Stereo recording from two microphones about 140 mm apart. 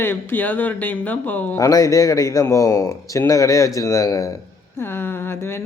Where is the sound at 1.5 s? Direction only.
25° left (ahead or behind).